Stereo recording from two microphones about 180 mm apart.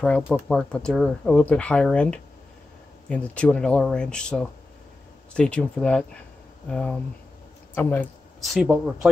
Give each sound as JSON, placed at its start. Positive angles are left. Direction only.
{"t": 0.0, "sound": "speech", "side_deg": 5}